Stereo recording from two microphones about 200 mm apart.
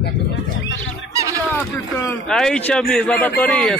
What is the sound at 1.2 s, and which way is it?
Fowl, 15° right (ahead or behind).